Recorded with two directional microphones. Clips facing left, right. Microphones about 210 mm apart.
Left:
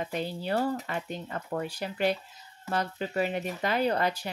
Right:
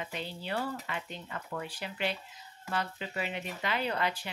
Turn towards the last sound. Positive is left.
turn(degrees=40)  # may be behind; listen again after turning